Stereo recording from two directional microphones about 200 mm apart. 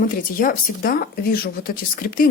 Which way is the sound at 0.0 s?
45° left (ahead or behind).